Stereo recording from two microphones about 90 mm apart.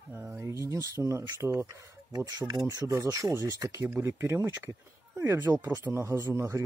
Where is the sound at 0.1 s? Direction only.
25° right (ahead or behind).